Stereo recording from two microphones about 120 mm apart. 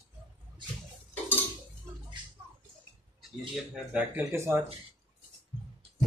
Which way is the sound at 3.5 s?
15° right (ahead or behind).